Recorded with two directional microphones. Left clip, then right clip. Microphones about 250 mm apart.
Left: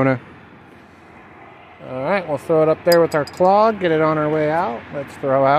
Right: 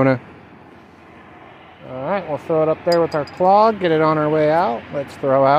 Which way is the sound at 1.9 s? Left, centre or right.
Centre.